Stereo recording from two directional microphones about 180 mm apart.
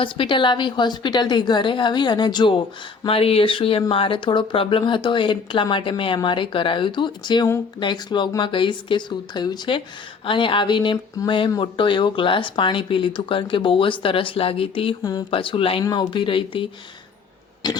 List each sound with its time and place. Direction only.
0.0 s speech: 30° left (ahead or behind)
17.6 s speech: 25° left (ahead or behind)